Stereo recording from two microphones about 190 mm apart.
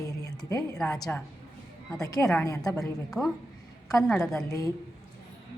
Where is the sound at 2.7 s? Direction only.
Centre (ahead or behind).